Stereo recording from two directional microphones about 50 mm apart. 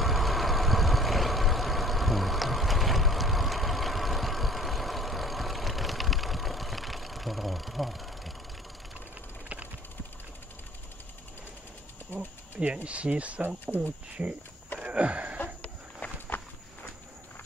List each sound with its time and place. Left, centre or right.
0.0 s vehicle: centre
12.8 s speech: right
14.8 s wheeze: right
15.3 s livestock: left